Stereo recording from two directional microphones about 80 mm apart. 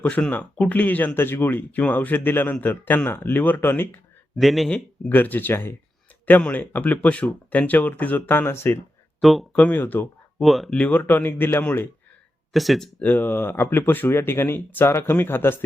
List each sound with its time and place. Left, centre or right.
0.0 s speech: centre
4.4 s speech: centre
4.7 s speech: left
9.2 s speech: centre
9.5 s speech: centre
10.4 s speech: centre
10.7 s speech: centre
12.5 s speech: centre
13.0 s speech: left